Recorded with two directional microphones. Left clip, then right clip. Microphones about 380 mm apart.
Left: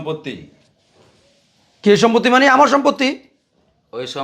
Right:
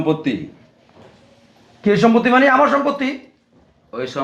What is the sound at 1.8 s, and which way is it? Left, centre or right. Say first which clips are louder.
A man's voice: left 2 dB; left.